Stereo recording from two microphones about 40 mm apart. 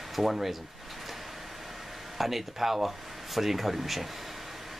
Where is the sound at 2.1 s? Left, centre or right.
Centre.